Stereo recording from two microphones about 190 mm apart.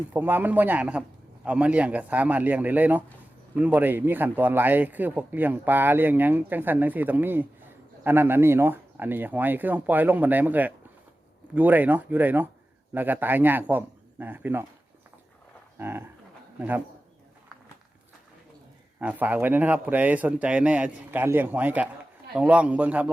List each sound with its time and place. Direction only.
0.1 s a man's voice: 10° right (ahead or behind)
15.8 s a man's voice: 10° right (ahead or behind)
18.9 s a man's voice: 10° right (ahead or behind)